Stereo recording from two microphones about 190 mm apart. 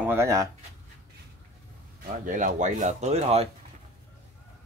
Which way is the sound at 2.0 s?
40° right (ahead or behind).